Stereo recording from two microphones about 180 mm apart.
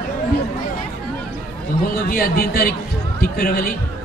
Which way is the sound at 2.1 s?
55° left (ahead or behind).